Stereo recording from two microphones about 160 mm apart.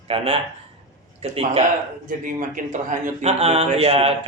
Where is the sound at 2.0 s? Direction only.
55° right (ahead or behind).